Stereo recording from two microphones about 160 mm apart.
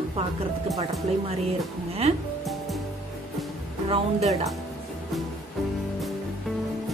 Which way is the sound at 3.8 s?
40° right (ahead or behind).